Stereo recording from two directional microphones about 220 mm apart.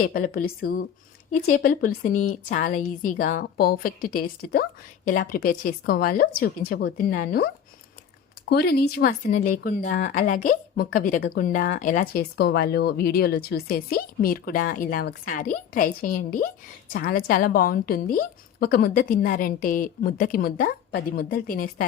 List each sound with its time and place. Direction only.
0.0 s a woman's voice: 45° left (ahead or behind)